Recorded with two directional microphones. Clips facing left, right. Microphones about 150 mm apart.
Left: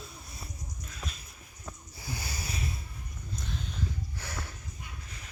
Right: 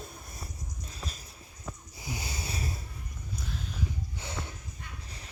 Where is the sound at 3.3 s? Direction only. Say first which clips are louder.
Even; 5° right (ahead or behind).